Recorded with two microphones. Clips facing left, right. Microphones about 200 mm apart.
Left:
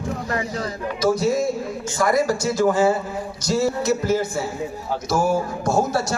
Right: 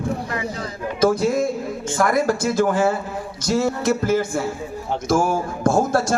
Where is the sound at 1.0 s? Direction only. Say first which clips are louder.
Right 2 dB; 55° right (ahead or behind).